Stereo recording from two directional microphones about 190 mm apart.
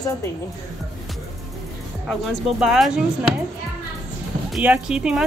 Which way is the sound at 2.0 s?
5° right (ahead or behind).